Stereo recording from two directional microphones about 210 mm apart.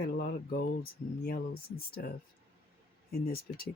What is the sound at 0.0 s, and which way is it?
Speech, 45° left (ahead or behind).